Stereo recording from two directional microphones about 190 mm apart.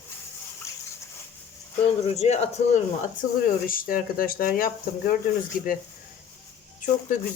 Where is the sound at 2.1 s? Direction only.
35° left (ahead or behind).